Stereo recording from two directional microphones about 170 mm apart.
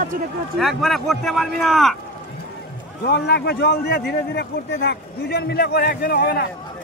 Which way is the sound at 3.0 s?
75° left (ahead or behind).